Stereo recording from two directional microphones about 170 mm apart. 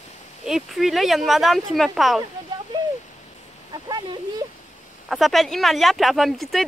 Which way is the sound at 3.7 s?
25° right (ahead or behind).